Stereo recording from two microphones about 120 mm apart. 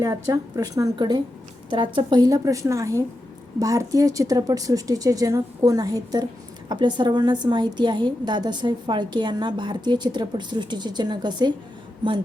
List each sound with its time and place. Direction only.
0.0 s a woman's voice: 25° right (ahead or behind)
0.9 s a woman's voice: 40° right (ahead or behind)